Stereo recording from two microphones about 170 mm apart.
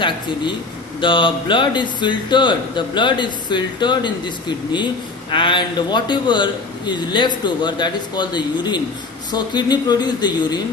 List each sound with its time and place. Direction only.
1.0 s speech: 30° left (ahead or behind)